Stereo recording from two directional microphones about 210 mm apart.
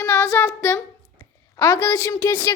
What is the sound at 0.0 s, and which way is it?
Child singing, 10° left (ahead or behind).